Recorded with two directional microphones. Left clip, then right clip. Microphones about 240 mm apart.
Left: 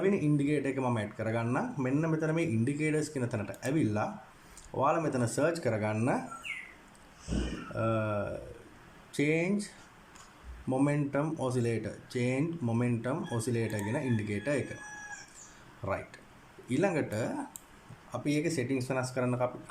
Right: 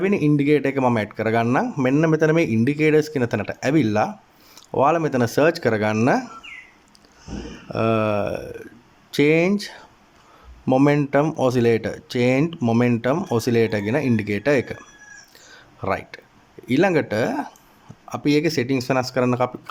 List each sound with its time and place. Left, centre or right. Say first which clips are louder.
0.0 s speech: right 10 dB; right
7.8 s speech: right 12 dB; right
15.8 s speech: right 11 dB; right